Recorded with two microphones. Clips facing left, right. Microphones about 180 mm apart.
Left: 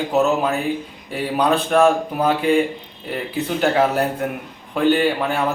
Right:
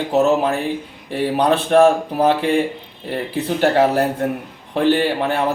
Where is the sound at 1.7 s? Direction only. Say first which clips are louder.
Right 4 dB; 30° right (ahead or behind).